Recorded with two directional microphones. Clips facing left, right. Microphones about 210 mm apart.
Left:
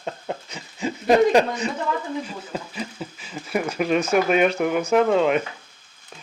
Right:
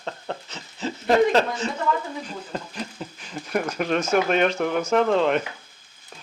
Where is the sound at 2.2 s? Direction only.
5° left (ahead or behind).